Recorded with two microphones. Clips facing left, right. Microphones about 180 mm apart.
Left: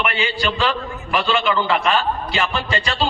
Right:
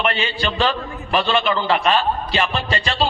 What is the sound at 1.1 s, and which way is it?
A man's voice, 35° right (ahead or behind).